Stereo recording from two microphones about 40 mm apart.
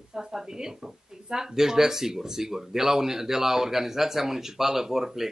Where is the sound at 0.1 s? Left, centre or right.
Centre.